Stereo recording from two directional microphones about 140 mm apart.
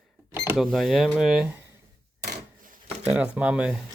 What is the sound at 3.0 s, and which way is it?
Speech, 10° right (ahead or behind).